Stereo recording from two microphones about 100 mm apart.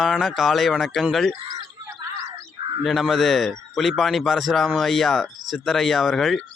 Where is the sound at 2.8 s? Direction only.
Centre (ahead or behind).